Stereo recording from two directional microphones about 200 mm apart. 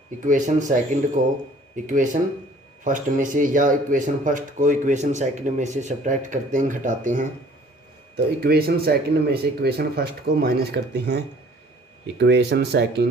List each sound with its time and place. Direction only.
0.3 s speech: 40° right (ahead or behind)
8.1 s speech: 50° right (ahead or behind)